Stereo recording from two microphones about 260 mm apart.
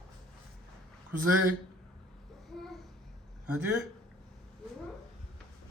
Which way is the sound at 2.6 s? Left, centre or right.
Centre.